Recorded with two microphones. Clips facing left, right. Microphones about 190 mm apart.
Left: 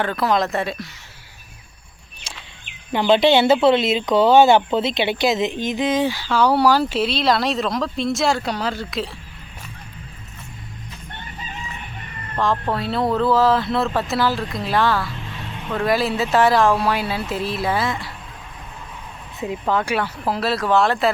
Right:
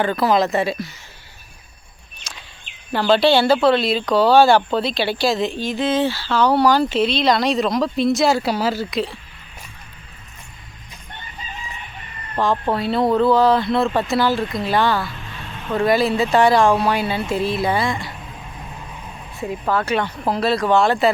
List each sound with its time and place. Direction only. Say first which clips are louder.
0.0 s speech: right 3 dB; centre (ahead or behind)
2.3 s a sound: left 1 dB; 30° left (ahead or behind)
2.9 s speech: even; 20° left (ahead or behind); by 9.0 s centre (ahead or behind)
12.4 s speech: right 2 dB; centre (ahead or behind)
19.4 s speech: even; 15° left (ahead or behind); by 21.1 s centre (ahead or behind)